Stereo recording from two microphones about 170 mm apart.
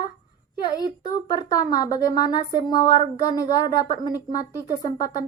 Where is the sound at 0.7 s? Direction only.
25° left (ahead or behind).